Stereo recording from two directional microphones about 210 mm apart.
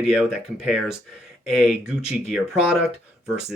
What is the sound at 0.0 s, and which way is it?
Speech, centre (ahead or behind).